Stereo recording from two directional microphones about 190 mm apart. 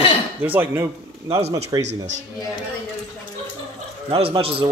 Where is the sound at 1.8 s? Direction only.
75° right (ahead or behind).